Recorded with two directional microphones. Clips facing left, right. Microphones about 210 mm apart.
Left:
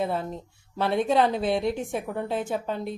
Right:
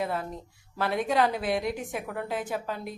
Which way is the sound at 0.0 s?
25° left (ahead or behind).